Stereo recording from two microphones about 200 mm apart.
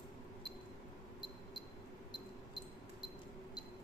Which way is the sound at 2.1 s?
20° left (ahead or behind).